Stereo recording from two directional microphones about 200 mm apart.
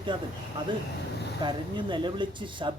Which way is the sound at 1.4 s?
25° right (ahead or behind).